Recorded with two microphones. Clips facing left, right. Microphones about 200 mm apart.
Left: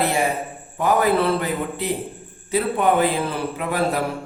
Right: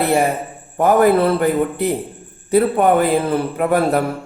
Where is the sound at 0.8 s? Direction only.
50° right (ahead or behind).